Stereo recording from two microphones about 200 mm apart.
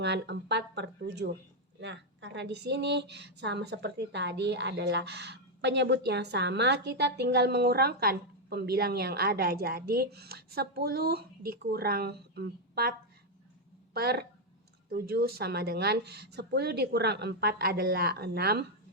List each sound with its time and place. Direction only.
0.0 s speech: 60° right (ahead or behind)
13.9 s speech: 50° right (ahead or behind)